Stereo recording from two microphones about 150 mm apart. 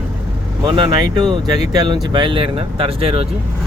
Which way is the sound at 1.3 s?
25° right (ahead or behind).